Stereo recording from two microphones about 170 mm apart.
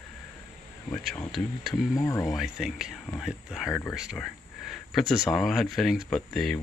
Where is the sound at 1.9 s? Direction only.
20° left (ahead or behind).